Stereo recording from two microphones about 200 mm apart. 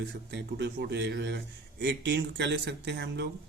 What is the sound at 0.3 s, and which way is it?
Speech, 60° right (ahead or behind).